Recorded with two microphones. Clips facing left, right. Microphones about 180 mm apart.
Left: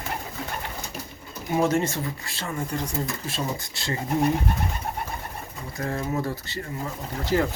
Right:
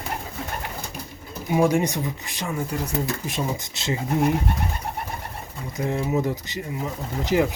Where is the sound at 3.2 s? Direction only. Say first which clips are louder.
Right 2 dB; 20° right (ahead or behind).